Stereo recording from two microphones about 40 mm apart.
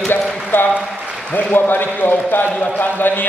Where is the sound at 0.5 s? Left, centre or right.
Left.